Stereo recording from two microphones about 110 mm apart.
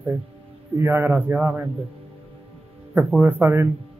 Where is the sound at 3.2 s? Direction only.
15° right (ahead or behind).